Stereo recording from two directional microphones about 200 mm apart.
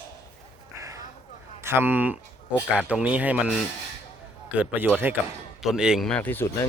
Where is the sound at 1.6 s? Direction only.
10° right (ahead or behind).